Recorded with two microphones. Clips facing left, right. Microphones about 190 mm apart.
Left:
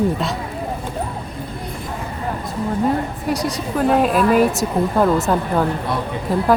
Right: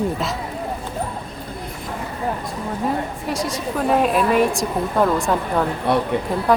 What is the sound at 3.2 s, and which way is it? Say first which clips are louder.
A woman's voice: left 2 dB; centre (ahead or behind).